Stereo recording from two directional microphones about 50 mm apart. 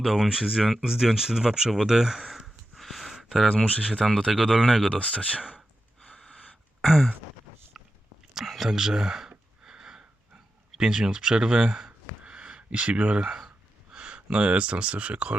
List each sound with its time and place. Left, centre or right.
0.0 s speech: centre
2.7 s a sound: centre
3.5 s speech: left
3.9 s speech: centre
4.5 s speech: centre
4.9 s speech: left
5.4 s speech: centre
6.8 s speech: centre
7.8 s a sound: centre
8.4 s speech: centre
9.6 s a sound: centre
10.8 s speech: centre; by 13.3 s right
13.9 s speech: centre